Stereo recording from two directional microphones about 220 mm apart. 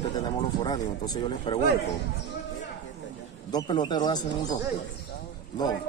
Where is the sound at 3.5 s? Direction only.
20° left (ahead or behind).